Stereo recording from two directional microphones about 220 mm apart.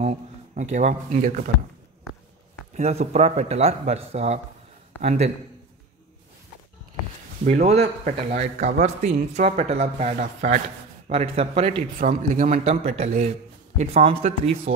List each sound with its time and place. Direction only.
0.6 s speech: 35° right (ahead or behind)
2.7 s a man's voice: 30° right (ahead or behind)
7.4 s a man's voice: 30° right (ahead or behind)